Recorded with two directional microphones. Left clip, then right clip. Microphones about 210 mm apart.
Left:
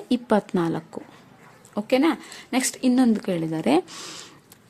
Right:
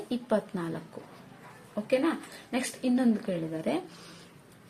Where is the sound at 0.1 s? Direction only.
50° left (ahead or behind).